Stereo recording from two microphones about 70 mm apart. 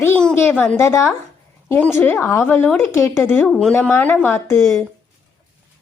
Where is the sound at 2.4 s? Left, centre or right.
Left.